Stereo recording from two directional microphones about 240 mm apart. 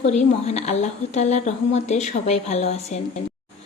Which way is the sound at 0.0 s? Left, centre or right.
Left.